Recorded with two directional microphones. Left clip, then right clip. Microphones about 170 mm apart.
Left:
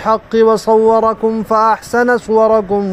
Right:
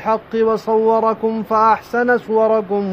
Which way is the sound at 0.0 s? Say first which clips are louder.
Left 5 dB; 35° left (ahead or behind).